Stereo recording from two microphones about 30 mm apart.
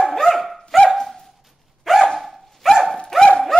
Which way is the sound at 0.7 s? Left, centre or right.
Centre.